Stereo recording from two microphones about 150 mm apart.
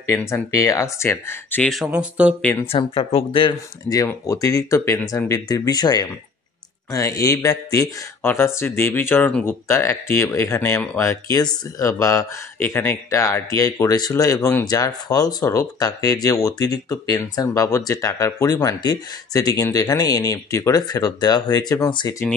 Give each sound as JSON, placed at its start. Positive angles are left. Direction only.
{"t": 0.1, "sound": "speech", "side_deg": 20}
{"t": 1.9, "sound": "speech", "side_deg": -10}
{"t": 2.4, "sound": "speech", "side_deg": 15}
{"t": 2.7, "sound": "speech", "side_deg": 40}
{"t": 3.9, "sound": "speech", "side_deg": 20}